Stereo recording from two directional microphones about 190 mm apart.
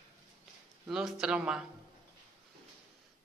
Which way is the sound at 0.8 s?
Centre (ahead or behind).